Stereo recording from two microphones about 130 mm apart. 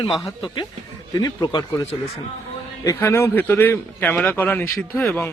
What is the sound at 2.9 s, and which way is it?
A man's voice, 20° left (ahead or behind).